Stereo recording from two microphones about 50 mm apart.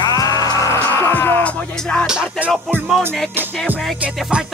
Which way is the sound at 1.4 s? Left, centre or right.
Left.